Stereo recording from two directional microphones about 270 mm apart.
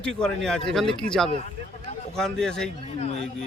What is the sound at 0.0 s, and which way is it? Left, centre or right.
A man's voice, centre.